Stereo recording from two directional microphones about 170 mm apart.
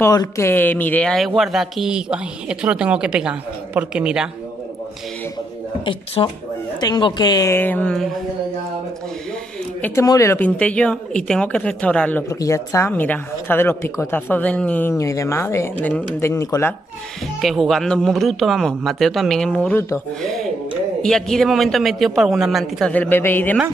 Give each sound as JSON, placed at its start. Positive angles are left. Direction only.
{"t": 0.0, "sound": "speech", "side_deg": 20}
{"t": 5.9, "sound": "a woman's voice", "side_deg": 30}
{"t": 9.8, "sound": "speech", "side_deg": 10}
{"t": 17.4, "sound": "speech", "side_deg": 0}